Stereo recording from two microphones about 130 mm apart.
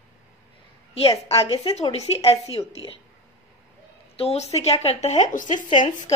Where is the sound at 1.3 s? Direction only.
45° left (ahead or behind).